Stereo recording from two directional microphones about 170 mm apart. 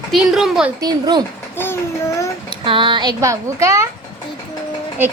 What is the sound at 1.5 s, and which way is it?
Child singing, 15° left (ahead or behind).